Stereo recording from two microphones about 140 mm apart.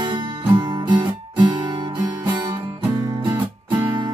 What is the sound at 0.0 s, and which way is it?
Guitar, 30° right (ahead or behind).